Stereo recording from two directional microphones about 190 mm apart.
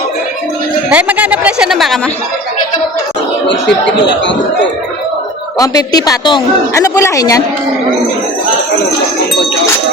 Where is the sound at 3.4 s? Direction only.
70° left (ahead or behind).